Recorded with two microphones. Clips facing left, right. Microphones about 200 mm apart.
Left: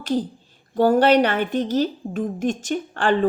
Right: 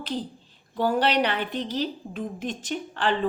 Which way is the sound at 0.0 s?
45° left (ahead or behind).